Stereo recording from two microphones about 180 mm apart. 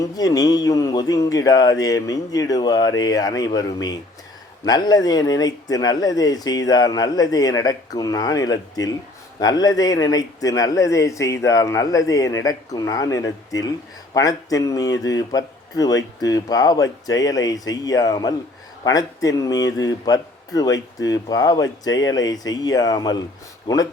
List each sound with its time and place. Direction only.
0.0 s a man's voice: 20° left (ahead or behind)